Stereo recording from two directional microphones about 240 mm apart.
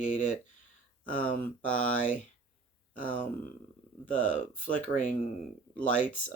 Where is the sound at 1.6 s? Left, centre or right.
Left.